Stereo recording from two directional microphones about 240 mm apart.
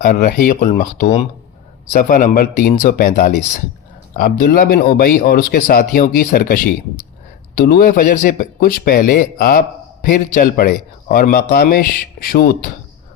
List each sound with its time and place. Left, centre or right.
0.0 s speech: left